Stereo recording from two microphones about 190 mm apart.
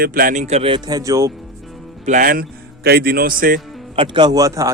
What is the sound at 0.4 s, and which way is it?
Speech, 30° right (ahead or behind).